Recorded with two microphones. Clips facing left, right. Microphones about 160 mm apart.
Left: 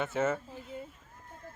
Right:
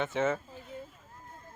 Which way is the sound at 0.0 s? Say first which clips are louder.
Right 1 dB; 5° left (ahead or behind).